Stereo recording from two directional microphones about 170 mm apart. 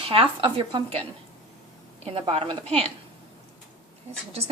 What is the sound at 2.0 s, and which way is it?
Speech, 35° right (ahead or behind).